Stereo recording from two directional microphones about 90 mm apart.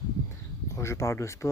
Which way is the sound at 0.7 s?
35° left (ahead or behind).